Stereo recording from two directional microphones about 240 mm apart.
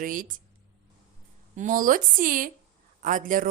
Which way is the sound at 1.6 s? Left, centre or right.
Right.